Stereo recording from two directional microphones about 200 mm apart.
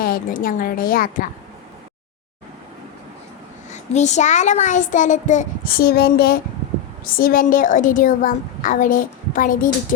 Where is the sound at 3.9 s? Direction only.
35° left (ahead or behind).